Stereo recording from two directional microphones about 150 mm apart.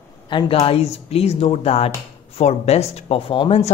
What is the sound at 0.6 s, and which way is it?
Speech, 45° left (ahead or behind).